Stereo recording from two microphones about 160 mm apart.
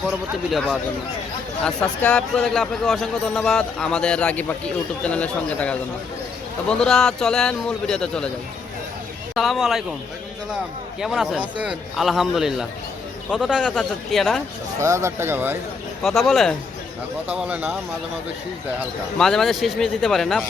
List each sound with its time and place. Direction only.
1.6 s speech: 5° left (ahead or behind)
9.3 s speech: centre (ahead or behind)
11.0 s speech: 5° right (ahead or behind)
14.8 s speech: 15° right (ahead or behind)
16.0 s speech: centre (ahead or behind)
19.2 s speech: centre (ahead or behind)